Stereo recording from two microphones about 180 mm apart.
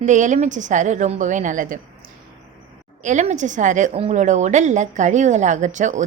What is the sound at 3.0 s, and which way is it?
A woman's voice, 40° right (ahead or behind).